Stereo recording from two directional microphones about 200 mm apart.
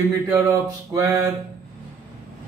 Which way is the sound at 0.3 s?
15° right (ahead or behind).